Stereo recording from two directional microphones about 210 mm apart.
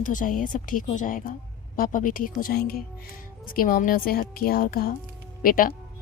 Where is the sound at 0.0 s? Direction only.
40° left (ahead or behind).